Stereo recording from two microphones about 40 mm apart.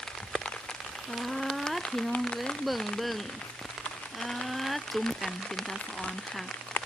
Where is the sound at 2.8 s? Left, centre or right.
Centre.